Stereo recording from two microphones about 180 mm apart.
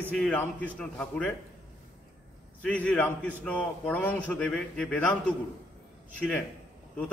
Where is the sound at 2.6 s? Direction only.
5° left (ahead or behind).